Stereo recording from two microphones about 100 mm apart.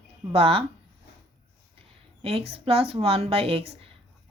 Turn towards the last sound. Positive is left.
turn(degrees=-75)  # may be behind; listen again after turning